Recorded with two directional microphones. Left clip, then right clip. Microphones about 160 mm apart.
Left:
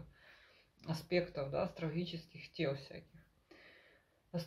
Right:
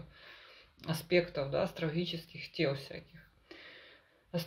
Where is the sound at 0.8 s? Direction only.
15° right (ahead or behind).